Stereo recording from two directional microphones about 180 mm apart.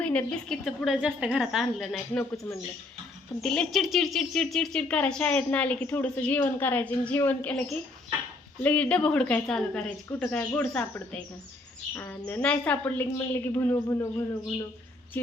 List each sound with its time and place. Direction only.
0.0 s a woman's voice: 10° left (ahead or behind)
2.3 s speech: 20° left (ahead or behind)
3.4 s speech: 5° left (ahead or behind)
8.6 s speech: 5° left (ahead or behind)
15.1 s speech: 10° left (ahead or behind)